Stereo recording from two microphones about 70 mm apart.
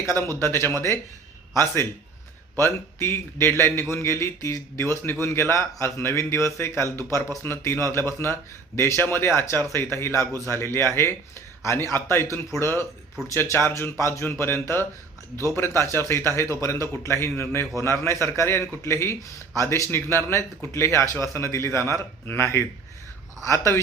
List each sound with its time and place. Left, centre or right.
0.2 s a man's voice: left
17.1 s a man's voice: left